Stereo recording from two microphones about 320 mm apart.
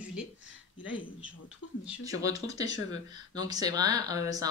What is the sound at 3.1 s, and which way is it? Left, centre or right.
Speech, centre.